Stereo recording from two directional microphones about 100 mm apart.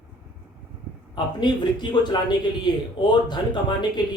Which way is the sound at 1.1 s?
45° left (ahead or behind).